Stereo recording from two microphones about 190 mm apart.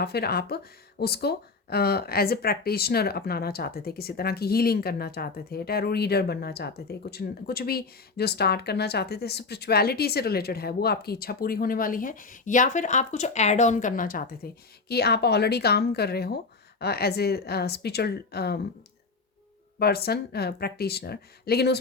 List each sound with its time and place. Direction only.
0.0 s speech: 55° left (ahead or behind)
19.8 s speech: 55° left (ahead or behind)